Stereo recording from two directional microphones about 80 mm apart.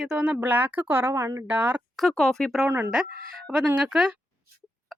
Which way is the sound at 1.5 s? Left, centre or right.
Right.